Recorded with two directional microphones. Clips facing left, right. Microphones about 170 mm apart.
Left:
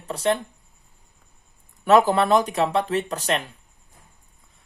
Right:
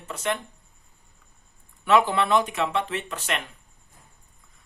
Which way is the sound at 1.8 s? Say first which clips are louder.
Left 4 dB; 40° left (ahead or behind).